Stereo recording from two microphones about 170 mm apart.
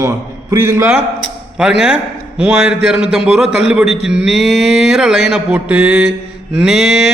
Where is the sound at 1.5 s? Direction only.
5° right (ahead or behind).